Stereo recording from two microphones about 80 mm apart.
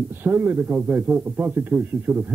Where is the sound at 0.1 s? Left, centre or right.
Right.